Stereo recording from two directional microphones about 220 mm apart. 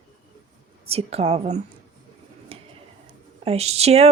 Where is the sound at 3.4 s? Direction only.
25° right (ahead or behind).